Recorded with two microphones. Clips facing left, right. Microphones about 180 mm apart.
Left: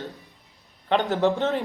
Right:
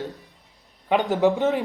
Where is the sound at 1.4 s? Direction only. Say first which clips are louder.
Right 3 dB; 10° right (ahead or behind).